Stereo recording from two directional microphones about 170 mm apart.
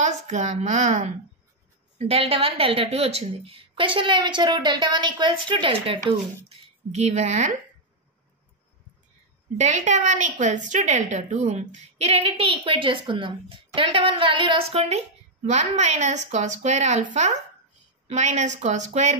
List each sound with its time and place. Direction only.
0.0 s a woman's voice: 45° right (ahead or behind)
9.6 s a woman's voice: 45° right (ahead or behind)